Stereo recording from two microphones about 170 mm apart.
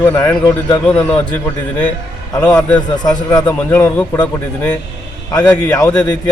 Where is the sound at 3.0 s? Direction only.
20° left (ahead or behind).